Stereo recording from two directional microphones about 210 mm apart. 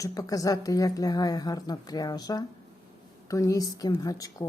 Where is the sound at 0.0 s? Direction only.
15° left (ahead or behind).